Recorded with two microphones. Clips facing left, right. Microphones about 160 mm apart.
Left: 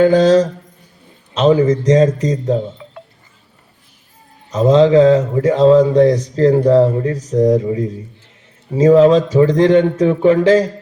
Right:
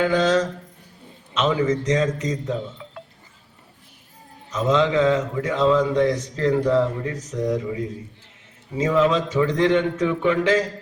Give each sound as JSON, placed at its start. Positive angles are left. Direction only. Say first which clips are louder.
{"t": 0.0, "sound": "mantra", "louder": "left 9 dB", "side_deg": 35}
{"t": 4.5, "sound": "mantra", "louder": "left 10 dB", "side_deg": 35}